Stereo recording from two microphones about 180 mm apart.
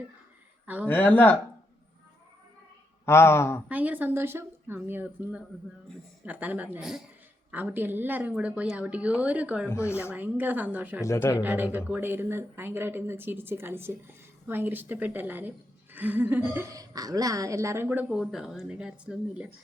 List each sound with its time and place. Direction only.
0.6 s a woman's voice: 10° right (ahead or behind)
0.9 s speech: 10° left (ahead or behind)
3.1 s speech: 15° left (ahead or behind)
3.7 s a woman's voice: 10° right (ahead or behind)
9.6 s speech: 15° left (ahead or behind)
10.0 s a woman's voice: 10° right (ahead or behind)
11.0 s speech: 15° left (ahead or behind)
11.4 s a woman's voice: 10° right (ahead or behind)